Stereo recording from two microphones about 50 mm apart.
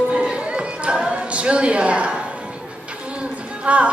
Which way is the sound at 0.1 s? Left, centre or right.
Centre.